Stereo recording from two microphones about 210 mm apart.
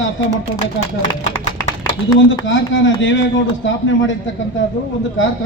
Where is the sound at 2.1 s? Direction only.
60° left (ahead or behind).